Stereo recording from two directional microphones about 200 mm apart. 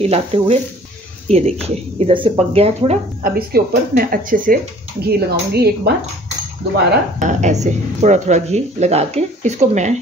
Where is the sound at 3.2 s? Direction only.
50° right (ahead or behind).